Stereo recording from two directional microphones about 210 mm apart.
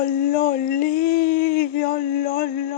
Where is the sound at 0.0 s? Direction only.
45° left (ahead or behind).